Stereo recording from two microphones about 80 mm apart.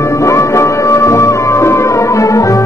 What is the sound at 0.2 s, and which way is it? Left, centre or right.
Music, left.